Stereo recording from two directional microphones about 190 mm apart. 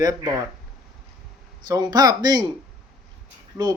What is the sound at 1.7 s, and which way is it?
Speech, 20° right (ahead or behind).